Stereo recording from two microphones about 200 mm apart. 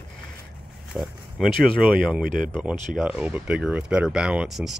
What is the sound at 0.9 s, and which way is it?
Speech, 5° right (ahead or behind).